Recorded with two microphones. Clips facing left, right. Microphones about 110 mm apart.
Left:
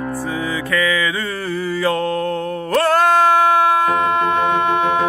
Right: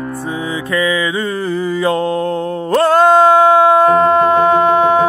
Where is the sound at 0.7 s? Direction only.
25° right (ahead or behind).